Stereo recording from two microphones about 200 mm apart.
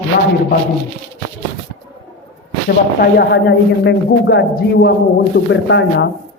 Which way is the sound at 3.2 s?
60° left (ahead or behind).